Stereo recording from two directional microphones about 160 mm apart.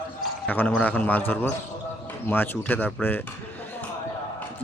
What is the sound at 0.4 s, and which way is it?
Speech, 10° left (ahead or behind).